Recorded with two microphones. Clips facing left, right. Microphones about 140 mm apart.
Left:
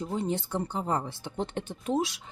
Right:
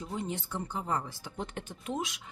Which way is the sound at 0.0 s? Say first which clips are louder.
Left 6 dB; 35° left (ahead or behind).